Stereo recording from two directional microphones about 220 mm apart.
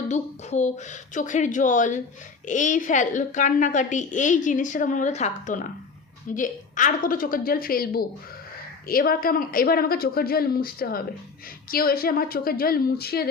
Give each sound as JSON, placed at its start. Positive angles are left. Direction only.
{"t": 0.1, "sound": "a woman's voice", "side_deg": 30}